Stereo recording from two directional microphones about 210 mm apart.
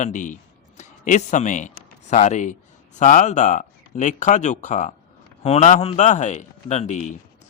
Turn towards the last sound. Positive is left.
turn(degrees=35)  # may be behind; listen again after turning